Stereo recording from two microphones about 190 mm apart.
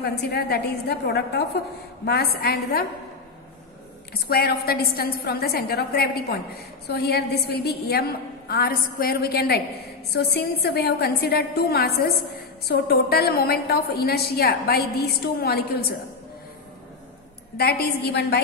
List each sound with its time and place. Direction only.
0.0 s a woman's voice: 60° left (ahead or behind)
4.1 s a woman's voice: 55° left (ahead or behind)
17.6 s a woman's voice: 55° left (ahead or behind)